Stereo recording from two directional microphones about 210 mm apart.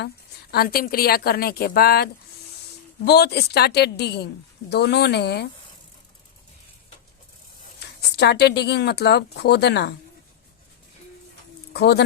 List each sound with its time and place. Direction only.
0.5 s speech: 45° left (ahead or behind)
8.1 s speech: 50° left (ahead or behind)
11.7 s speech: 50° left (ahead or behind)